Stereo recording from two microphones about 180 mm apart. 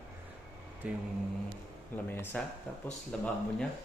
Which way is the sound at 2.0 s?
10° left (ahead or behind).